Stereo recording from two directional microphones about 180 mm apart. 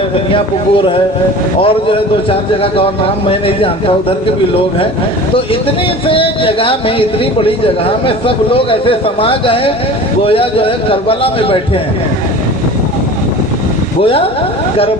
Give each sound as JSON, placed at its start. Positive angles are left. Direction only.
{"t": 0.3, "sound": "speech", "side_deg": 30}
{"t": 3.2, "sound": "a man's voice", "side_deg": 30}
{"t": 6.1, "sound": "a man's voice", "side_deg": 30}